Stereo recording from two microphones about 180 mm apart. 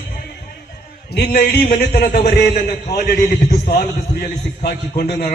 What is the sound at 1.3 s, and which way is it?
A man's voice, 55° left (ahead or behind).